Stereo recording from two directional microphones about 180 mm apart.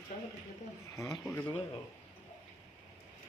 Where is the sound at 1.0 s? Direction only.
20° left (ahead or behind).